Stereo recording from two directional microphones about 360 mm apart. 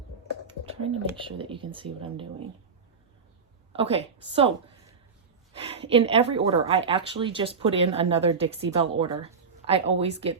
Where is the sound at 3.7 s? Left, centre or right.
Centre.